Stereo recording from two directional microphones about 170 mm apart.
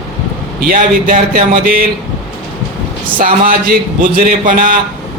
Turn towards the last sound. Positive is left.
turn(degrees=-50)  # may be behind; listen again after turning